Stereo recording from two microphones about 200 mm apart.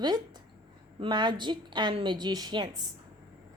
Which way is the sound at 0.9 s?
25° right (ahead or behind).